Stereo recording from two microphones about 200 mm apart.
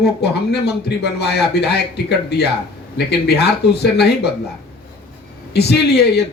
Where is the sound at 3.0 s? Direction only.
55° left (ahead or behind).